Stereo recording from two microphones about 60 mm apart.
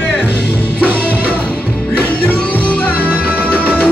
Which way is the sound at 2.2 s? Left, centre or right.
Left.